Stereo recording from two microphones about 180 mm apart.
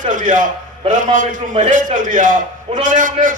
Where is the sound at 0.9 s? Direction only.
45° right (ahead or behind).